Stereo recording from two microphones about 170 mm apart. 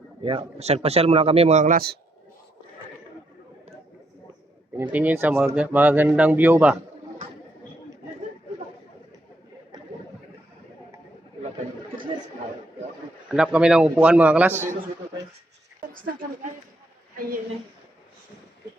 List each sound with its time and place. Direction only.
0.2 s a man's voice: 30° right (ahead or behind); by 2.0 s 60° right (ahead or behind)
4.8 s speech: 10° right (ahead or behind)
13.2 s speech: 5° right (ahead or behind)
15.9 s a woman's voice: 55° right (ahead or behind)